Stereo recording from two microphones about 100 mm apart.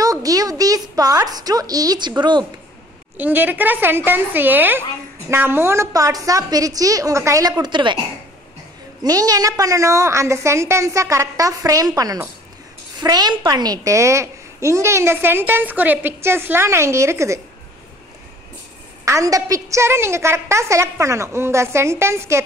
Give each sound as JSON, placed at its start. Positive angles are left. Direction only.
{"t": 0.0, "sound": "a woman's voice", "side_deg": -35}
{"t": 3.2, "sound": "a woman's voice", "side_deg": -15}
{"t": 9.0, "sound": "a woman's voice", "side_deg": -40}
{"t": 19.0, "sound": "a woman's voice", "side_deg": -35}